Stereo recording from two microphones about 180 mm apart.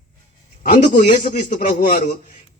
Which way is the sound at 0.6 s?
50° left (ahead or behind).